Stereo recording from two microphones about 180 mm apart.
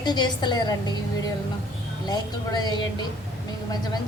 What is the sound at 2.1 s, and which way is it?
Speech, 20° left (ahead or behind).